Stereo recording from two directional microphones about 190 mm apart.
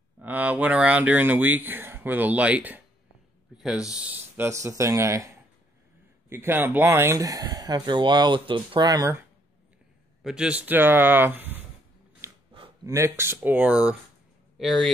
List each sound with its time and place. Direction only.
0.2 s speech: 10° right (ahead or behind)
10.2 s speech: 5° right (ahead or behind)
12.2 s dog: 15° right (ahead or behind)
12.8 s speech: 15° right (ahead or behind)